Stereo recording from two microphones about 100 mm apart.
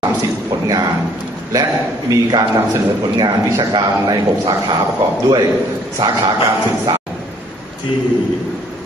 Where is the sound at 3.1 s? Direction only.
50° right (ahead or behind).